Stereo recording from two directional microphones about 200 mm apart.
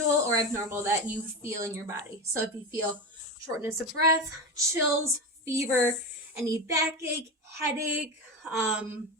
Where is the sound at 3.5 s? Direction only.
15° right (ahead or behind).